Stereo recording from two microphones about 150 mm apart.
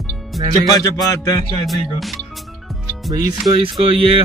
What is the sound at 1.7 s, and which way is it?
Speech, centre (ahead or behind).